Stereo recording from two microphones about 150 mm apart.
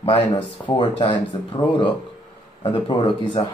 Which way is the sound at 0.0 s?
35° left (ahead or behind).